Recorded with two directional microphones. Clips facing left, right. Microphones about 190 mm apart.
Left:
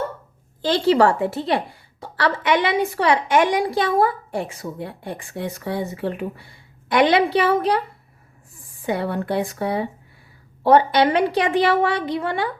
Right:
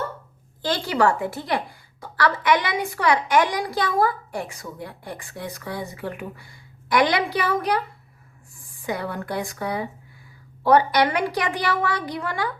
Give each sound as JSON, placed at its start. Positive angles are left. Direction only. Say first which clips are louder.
{"t": 0.6, "sound": "a woman's voice", "louder": "left 5 dB", "side_deg": 30}
{"t": 8.9, "sound": "a woman's voice", "louder": "left 5 dB", "side_deg": 30}